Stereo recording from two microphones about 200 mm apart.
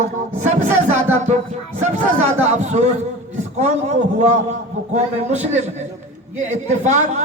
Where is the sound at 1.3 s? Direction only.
35° right (ahead or behind).